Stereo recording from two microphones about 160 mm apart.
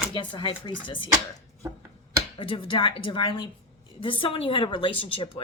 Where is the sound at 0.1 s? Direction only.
30° left (ahead or behind).